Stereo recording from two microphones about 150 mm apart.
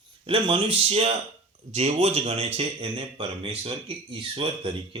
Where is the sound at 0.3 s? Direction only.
35° right (ahead or behind).